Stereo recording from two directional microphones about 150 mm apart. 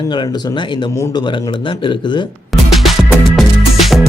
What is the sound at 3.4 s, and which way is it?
Music, centre (ahead or behind).